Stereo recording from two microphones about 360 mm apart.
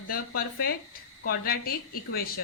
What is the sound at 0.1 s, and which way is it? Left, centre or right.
Speech, left.